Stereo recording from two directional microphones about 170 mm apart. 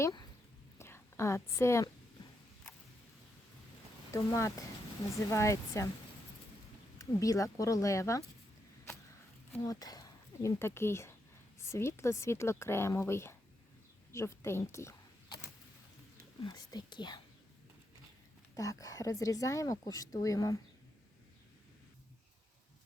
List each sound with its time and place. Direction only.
0.8 s a woman's voice: 15° left (ahead or behind)
4.1 s speech: 15° left (ahead or behind)
7.0 s speech: 20° left (ahead or behind)
9.6 s speech: 20° left (ahead or behind)
16.4 s speech: 25° left (ahead or behind)
18.5 s speech: 20° left (ahead or behind)